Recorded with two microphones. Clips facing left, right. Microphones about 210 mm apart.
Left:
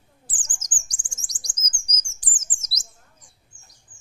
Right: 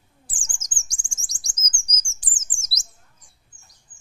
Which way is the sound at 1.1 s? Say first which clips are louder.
Left 2 dB; 25° right (ahead or behind).